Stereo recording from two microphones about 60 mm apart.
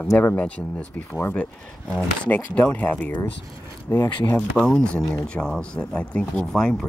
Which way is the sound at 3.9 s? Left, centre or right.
Left.